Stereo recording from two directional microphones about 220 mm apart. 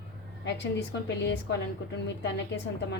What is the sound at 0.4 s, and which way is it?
A woman's voice, 50° left (ahead or behind).